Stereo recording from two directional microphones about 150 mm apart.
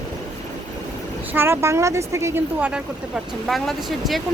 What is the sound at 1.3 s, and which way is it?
Speech, 15° right (ahead or behind).